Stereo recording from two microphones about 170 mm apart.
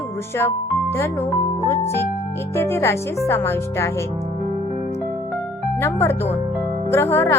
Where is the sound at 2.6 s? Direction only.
15° left (ahead or behind).